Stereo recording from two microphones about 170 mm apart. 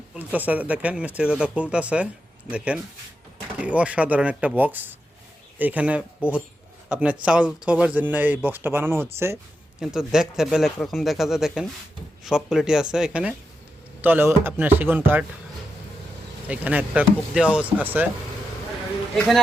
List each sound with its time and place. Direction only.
0.1 s a man's voice: 10° right (ahead or behind)
9.8 s speech: 5° right (ahead or behind)
16.5 s speech: 10° right (ahead or behind)